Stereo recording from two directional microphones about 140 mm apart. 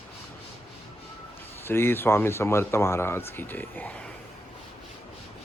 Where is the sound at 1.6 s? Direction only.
15° left (ahead or behind).